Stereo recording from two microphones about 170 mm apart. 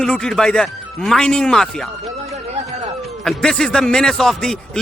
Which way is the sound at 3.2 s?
Centre (ahead or behind).